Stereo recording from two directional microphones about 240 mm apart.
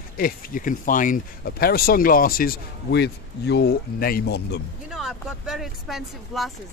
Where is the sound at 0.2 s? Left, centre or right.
Left.